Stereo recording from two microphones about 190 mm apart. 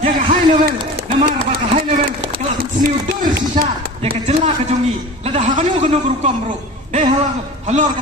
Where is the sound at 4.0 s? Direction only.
30° right (ahead or behind).